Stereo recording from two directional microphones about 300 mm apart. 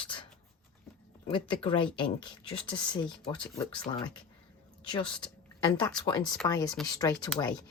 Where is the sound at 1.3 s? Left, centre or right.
Centre.